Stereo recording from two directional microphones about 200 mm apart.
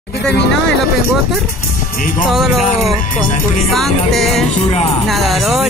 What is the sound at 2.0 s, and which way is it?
Speech, 45° left (ahead or behind).